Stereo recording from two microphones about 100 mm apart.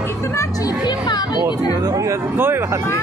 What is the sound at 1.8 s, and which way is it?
Speech, 35° right (ahead or behind).